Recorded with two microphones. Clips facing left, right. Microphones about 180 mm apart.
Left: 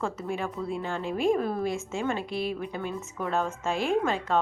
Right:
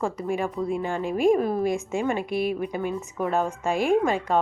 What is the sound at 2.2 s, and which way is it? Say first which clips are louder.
Speech: right 5 dB; 50° right (ahead or behind).